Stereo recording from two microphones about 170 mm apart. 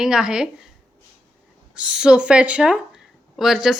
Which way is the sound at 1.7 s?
5° right (ahead or behind).